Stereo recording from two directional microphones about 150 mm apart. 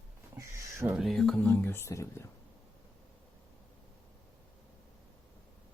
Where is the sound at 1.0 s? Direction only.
Centre (ahead or behind); by 2.2 s 20° left (ahead or behind).